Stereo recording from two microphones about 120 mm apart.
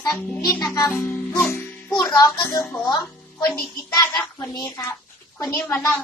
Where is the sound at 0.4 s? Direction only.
35° left (ahead or behind).